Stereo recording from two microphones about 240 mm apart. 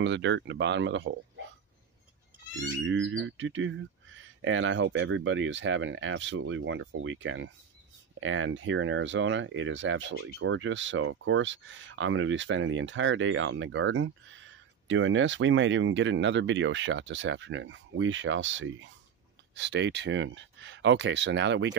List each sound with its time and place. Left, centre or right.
0.0 s speech: right
2.5 s speech: right